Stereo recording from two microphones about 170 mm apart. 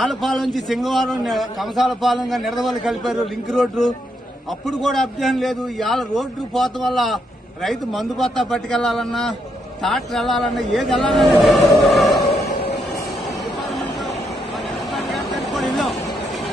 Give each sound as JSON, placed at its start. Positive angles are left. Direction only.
{"t": 0.0, "sound": "a man's voice", "side_deg": 0}
{"t": 11.1, "sound": "a sound", "side_deg": 0}
{"t": 14.9, "sound": "vehicle", "side_deg": 0}